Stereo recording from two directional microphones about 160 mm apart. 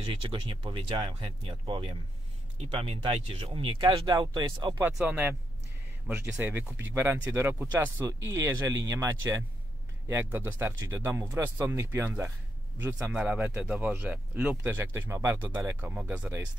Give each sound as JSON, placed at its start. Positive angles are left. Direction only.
{"t": 0.0, "sound": "speech", "side_deg": -35}
{"t": 4.7, "sound": "speech", "side_deg": -10}